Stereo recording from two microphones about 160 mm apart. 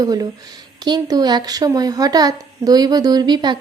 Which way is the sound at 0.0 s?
25° right (ahead or behind).